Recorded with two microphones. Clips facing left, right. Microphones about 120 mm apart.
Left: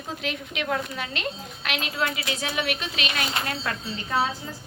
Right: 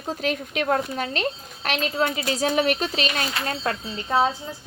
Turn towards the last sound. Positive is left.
turn(degrees=-25)  # may be behind; listen again after turning